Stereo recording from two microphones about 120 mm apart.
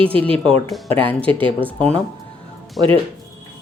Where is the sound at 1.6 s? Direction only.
15° left (ahead or behind).